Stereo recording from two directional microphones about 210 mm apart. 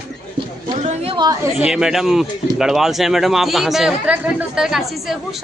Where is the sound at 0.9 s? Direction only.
25° right (ahead or behind).